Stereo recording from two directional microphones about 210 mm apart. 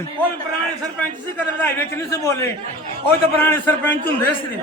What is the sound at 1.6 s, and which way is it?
A man's voice, 10° left (ahead or behind).